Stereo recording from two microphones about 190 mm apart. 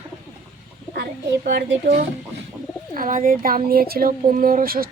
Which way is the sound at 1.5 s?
55° right (ahead or behind).